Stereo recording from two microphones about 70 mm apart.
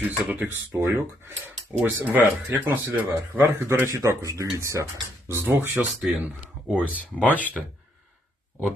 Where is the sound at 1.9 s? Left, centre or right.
Right.